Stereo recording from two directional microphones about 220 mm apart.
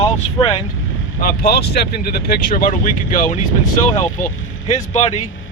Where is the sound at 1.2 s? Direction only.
40° left (ahead or behind).